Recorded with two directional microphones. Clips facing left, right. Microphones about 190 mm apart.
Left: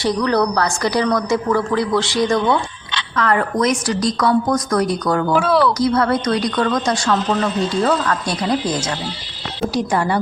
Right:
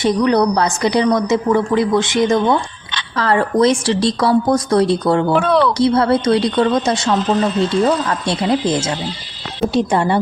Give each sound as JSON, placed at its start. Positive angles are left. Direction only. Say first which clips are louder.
{"t": 0.0, "sound": "speech", "louder": "right 3 dB", "side_deg": -20}
{"t": 5.3, "sound": "speech", "louder": "left 2 dB", "side_deg": 5}
{"t": 5.7, "sound": "speech", "louder": "right 3 dB", "side_deg": -30}